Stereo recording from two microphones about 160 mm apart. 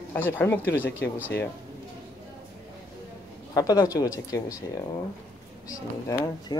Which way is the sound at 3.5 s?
20° left (ahead or behind).